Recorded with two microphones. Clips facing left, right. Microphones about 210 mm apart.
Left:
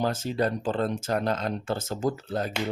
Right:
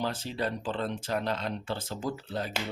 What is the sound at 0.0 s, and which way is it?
Speech, 45° left (ahead or behind).